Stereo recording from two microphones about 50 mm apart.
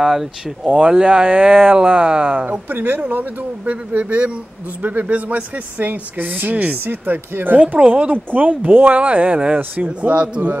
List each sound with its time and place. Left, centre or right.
0.0 s speech: centre
0.7 s speech: right
6.8 s speech: right